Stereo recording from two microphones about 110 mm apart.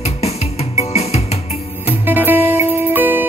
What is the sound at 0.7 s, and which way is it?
Music, 75° left (ahead or behind).